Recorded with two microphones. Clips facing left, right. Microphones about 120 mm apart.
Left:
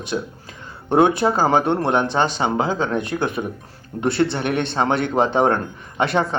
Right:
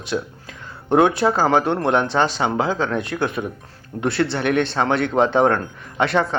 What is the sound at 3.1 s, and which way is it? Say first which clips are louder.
Speech: right 1 dB; 30° left (ahead or behind).